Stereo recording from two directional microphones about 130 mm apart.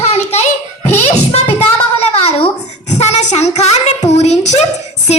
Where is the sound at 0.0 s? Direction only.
55° left (ahead or behind).